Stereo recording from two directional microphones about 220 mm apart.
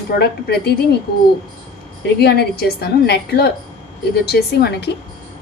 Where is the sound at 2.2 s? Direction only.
45° left (ahead or behind).